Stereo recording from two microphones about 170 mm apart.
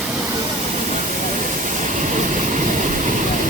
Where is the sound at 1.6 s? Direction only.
45° right (ahead or behind).